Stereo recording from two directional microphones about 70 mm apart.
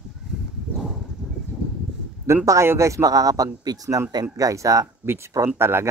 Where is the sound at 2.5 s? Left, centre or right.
Right.